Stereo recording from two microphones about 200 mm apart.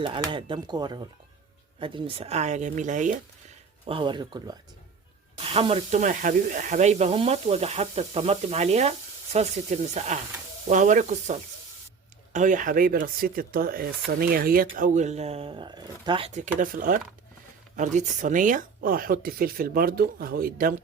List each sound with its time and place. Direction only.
0.0 s speech: 25° right (ahead or behind)
3.8 s speech: 25° right (ahead or behind)
16.6 s speech: 45° right (ahead or behind)